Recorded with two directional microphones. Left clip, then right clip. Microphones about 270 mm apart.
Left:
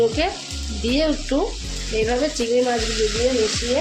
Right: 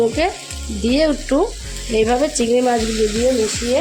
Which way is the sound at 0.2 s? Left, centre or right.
Right.